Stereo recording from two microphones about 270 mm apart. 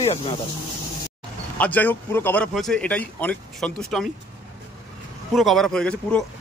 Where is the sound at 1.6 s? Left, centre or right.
Centre.